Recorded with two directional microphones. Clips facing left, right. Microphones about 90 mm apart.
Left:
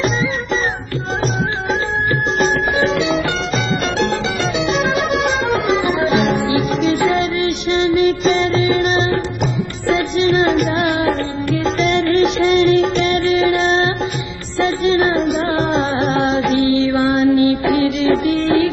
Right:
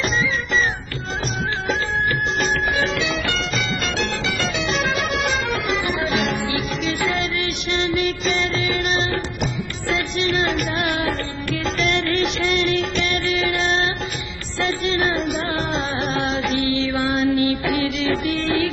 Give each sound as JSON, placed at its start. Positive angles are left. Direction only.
{"t": 0.0, "sound": "music", "side_deg": 25}
{"t": 2.3, "sound": "music", "side_deg": 25}